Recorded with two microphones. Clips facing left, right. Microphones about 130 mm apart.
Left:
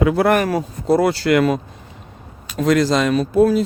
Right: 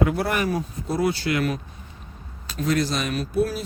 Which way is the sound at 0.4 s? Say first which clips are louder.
Left 7 dB; 85° left.